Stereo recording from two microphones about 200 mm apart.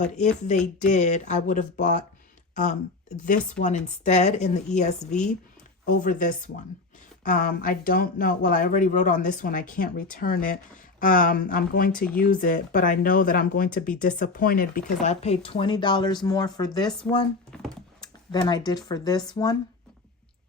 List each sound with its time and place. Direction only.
0.0 s speech: 35° left (ahead or behind)
3.2 s speech: 40° left (ahead or behind); by 16.9 s 20° left (ahead or behind)
17.5 s a sound: centre (ahead or behind)
18.0 s speech: 20° left (ahead or behind)